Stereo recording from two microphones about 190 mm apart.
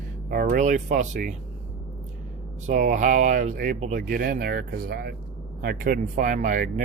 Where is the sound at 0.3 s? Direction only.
45° right (ahead or behind).